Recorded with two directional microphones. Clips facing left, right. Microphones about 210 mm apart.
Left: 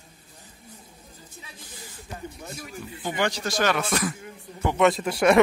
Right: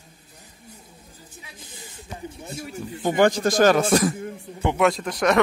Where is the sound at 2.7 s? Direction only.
45° right (ahead or behind).